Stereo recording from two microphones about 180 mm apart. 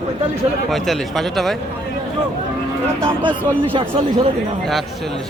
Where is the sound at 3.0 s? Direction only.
25° right (ahead or behind).